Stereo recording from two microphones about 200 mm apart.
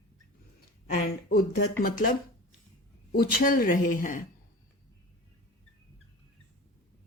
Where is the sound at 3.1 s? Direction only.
45° left (ahead or behind).